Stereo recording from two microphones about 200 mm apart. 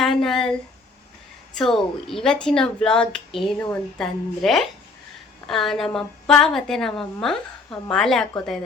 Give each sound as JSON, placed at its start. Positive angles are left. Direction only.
{"t": 0.0, "sound": "speech", "side_deg": 0}
{"t": 1.5, "sound": "a woman's voice", "side_deg": 0}